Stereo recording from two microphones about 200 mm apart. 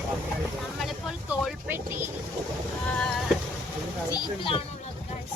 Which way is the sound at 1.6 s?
10° right (ahead or behind).